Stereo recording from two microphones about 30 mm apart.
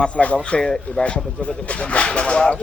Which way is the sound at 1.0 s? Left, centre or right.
Left.